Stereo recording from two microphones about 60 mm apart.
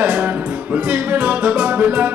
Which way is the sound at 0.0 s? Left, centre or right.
Right.